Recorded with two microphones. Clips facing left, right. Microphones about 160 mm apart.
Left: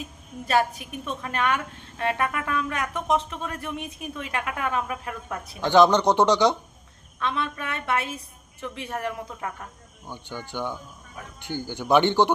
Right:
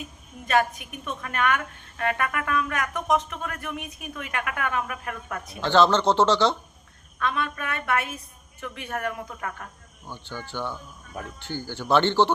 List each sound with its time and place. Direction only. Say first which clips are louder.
0.4 s a woman's voice: even; 30° left (ahead or behind); by 6.6 s 15° left (ahead or behind)
7.2 s a woman's voice: even; 25° left (ahead or behind)
10.1 s speech: left 1 dB; 15° left (ahead or behind)